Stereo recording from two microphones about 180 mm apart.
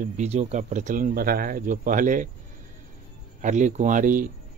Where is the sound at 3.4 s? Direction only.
40° right (ahead or behind).